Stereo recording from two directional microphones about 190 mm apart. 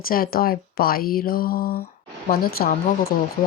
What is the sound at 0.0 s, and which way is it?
A woman's voice, 50° left (ahead or behind).